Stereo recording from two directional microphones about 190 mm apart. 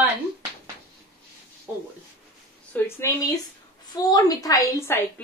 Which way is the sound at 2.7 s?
10° left (ahead or behind).